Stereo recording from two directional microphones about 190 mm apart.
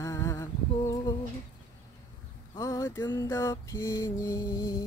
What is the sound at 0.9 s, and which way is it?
Humming, 20° left (ahead or behind).